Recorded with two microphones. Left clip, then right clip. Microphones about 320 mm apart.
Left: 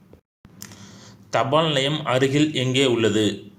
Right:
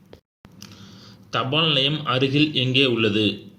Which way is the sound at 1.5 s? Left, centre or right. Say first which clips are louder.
Right 3 dB; centre.